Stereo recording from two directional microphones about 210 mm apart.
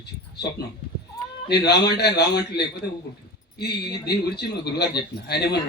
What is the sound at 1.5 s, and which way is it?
A man's voice, 55° left (ahead or behind).